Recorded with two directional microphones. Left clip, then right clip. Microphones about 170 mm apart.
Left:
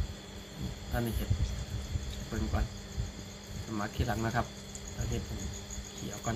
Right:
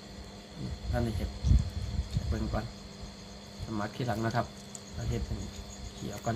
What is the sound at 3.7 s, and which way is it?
Speech, 25° right (ahead or behind).